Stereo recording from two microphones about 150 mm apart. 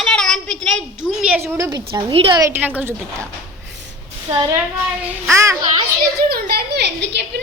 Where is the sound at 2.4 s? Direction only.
15° right (ahead or behind).